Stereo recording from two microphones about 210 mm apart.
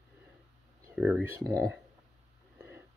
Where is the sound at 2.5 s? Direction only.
10° right (ahead or behind).